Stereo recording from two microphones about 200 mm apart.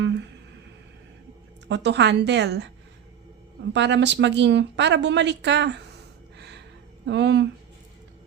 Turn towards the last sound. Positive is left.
turn(degrees=-60)  # may be behind; listen again after turning